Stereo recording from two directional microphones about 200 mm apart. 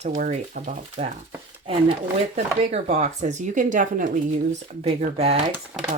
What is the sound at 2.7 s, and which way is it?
Speech, 35° right (ahead or behind).